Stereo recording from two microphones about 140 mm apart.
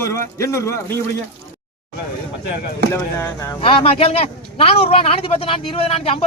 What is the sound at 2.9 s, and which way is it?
Speech, 20° left (ahead or behind).